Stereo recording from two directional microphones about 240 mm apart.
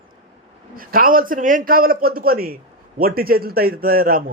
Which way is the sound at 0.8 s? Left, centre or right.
Right.